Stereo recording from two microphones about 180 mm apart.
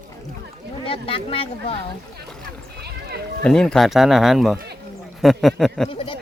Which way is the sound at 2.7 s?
65° right (ahead or behind).